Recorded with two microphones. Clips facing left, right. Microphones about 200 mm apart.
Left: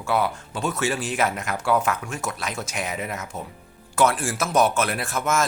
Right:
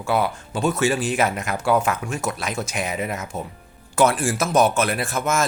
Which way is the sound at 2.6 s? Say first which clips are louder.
Right 4 dB; centre (ahead or behind).